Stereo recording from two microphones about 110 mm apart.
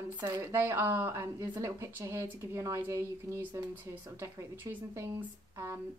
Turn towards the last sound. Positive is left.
turn(degrees=-25)  # may be behind; listen again after turning